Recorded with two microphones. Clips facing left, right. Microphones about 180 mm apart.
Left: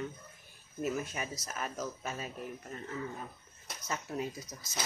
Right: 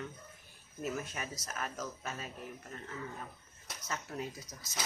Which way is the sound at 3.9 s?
15° left (ahead or behind).